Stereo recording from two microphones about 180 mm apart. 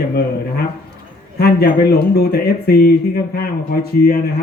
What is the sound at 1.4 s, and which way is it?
Speech, 60° left (ahead or behind).